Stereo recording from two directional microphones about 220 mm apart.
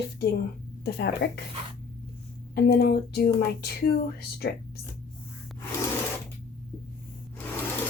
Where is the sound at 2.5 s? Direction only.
45° left (ahead or behind).